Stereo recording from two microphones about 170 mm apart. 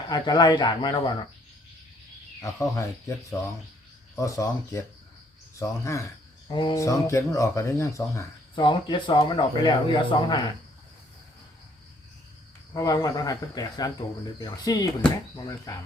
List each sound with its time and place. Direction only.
0.1 s speech: 25° left (ahead or behind)
2.4 s speech: 20° left (ahead or behind)
6.5 s speech: 30° left (ahead or behind)
6.7 s speech: 20° left (ahead or behind)
8.5 s speech: 30° left (ahead or behind)
12.7 s speech: 20° left (ahead or behind)